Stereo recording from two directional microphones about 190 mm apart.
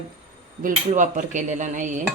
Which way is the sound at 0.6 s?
40° right (ahead or behind).